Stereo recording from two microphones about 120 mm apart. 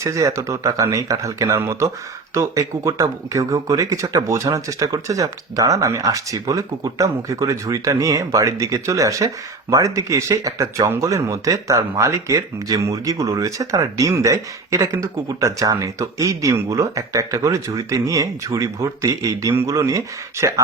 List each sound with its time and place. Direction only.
0.0 s speech: 25° right (ahead or behind)